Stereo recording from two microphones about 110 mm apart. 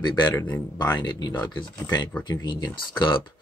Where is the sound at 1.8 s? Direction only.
30° left (ahead or behind).